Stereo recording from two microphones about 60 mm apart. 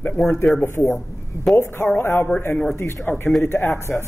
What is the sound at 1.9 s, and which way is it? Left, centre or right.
Speech, left.